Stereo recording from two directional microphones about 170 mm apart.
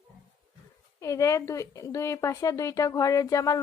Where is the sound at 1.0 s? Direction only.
20° left (ahead or behind).